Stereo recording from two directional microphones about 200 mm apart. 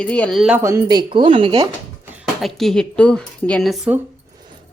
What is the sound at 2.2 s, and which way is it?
Speech, centre (ahead or behind).